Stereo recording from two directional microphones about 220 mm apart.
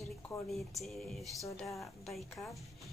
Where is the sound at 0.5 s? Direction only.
Centre (ahead or behind).